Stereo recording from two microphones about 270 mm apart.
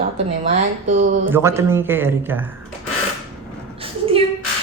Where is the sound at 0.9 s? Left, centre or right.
Right.